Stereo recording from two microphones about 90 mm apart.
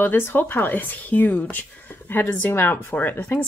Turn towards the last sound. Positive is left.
turn(degrees=20)  # may be behind; listen again after turning